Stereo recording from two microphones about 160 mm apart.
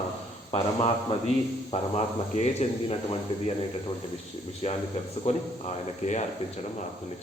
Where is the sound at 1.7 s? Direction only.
45° left (ahead or behind).